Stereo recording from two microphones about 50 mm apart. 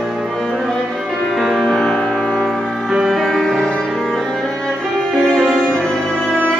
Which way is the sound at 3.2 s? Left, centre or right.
Centre.